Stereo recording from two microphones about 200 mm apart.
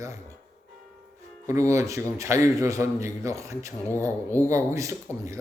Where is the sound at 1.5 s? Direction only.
15° right (ahead or behind).